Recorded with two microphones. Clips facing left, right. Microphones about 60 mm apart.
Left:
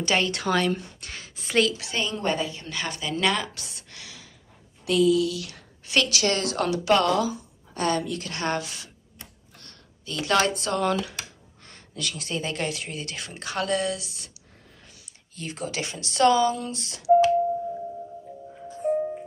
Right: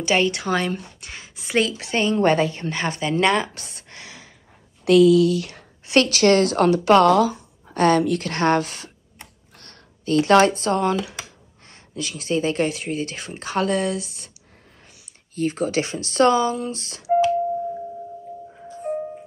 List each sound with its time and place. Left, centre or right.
0.0 s speech: centre
1.7 s speech: right
2.3 s speech: right
4.8 s a sound: right
5.3 s a woman's voice: right
10.8 s speech: centre; by 14.3 s right
15.3 s speech: right
16.8 s music: right